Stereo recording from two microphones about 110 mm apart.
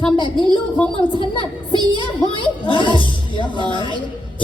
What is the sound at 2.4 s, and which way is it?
A man's voice, 50° left (ahead or behind).